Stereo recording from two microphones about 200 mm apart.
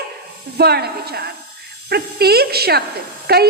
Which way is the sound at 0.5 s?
55° right (ahead or behind).